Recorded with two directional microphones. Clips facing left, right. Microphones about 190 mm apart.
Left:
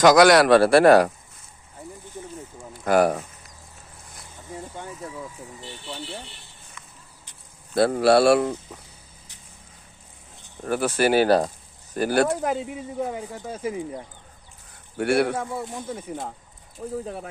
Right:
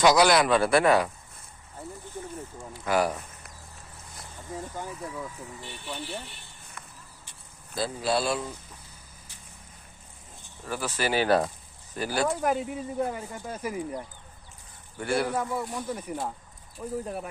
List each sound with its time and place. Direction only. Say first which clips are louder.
0.2 s speech: left 7 dB; 80° left
2.8 s speech: left 6 dB; 50° left (ahead or behind)
5.9 s speech: even; 25° left (ahead or behind)
6.8 s a sound: right 2 dB; 55° right (ahead or behind)
7.7 s speech: left 10 dB; 65° left (ahead or behind)
10.6 s speech: left 8 dB; 60° left (ahead or behind)
11.3 s speech: left 4 dB; 30° left (ahead or behind)
11.9 s speech: left 6 dB; 55° left (ahead or behind)
12.5 s speech: even; 20° left (ahead or behind)
14.9 s speech: left 6 dB; 70° left (ahead or behind)
15.4 s speech: even; 25° left (ahead or behind)
16.8 s speech: left 2 dB; 35° left (ahead or behind)